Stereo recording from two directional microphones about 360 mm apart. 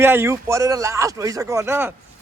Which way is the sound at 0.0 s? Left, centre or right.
Centre.